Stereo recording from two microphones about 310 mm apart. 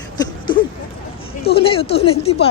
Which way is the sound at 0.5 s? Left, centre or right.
Centre.